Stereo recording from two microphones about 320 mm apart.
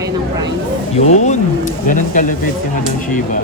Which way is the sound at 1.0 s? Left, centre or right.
Left.